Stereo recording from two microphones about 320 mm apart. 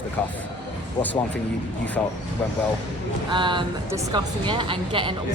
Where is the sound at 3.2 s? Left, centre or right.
Centre.